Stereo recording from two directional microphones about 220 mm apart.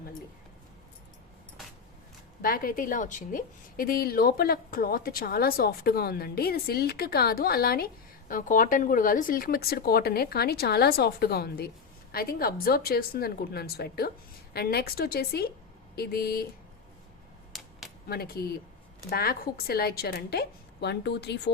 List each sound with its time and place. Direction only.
2.4 s a woman's voice: 40° left (ahead or behind)
17.5 s a sound: centre (ahead or behind)
18.1 s a woman's voice: 45° left (ahead or behind)